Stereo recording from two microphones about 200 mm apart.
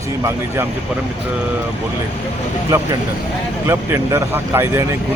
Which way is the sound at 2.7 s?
15° right (ahead or behind).